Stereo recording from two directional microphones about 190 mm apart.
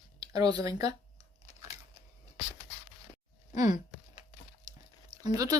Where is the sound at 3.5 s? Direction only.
20° right (ahead or behind).